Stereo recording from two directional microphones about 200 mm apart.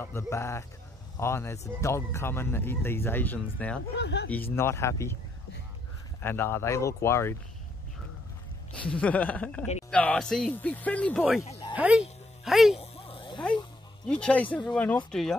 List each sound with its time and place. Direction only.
0.0 s speech: 15° left (ahead or behind)
3.9 s speech: 60° left (ahead or behind)
4.3 s speech: 10° left (ahead or behind)
6.2 s speech: 10° left (ahead or behind)
8.8 s speech: 5° left (ahead or behind)
11.7 s speech: 5° right (ahead or behind)
12.7 s a sound: 30° left (ahead or behind)
14.0 s speech: 5° left (ahead or behind)